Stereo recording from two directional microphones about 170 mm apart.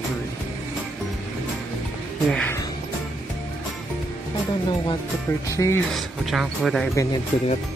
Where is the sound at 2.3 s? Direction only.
10° left (ahead or behind).